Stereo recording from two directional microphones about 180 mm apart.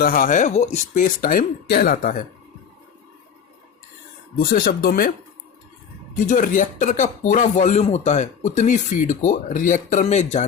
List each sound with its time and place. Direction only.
0.0 s speech: 50° left (ahead or behind)
4.4 s speech: 55° left (ahead or behind)
6.1 s speech: 45° left (ahead or behind)